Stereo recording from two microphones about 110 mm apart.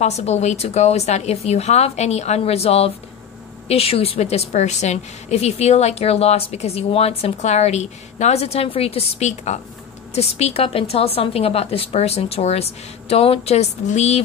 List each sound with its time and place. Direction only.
0.0 s a woman's voice: 80° left
10.1 s a woman's voice: 70° left (ahead or behind); by 14.2 s 90° left